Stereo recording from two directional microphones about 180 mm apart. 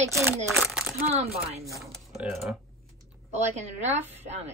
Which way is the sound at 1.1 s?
35° right (ahead or behind).